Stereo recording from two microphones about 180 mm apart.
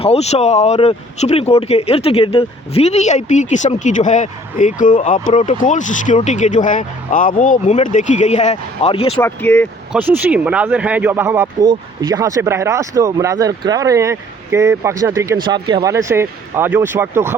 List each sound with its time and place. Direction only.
0.0 s speech: 35° left (ahead or behind)
9.2 s speech: 10° left (ahead or behind)
9.9 s speech: 10° right (ahead or behind)